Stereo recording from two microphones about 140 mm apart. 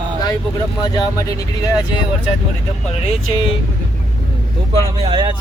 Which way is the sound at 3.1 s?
45° left (ahead or behind).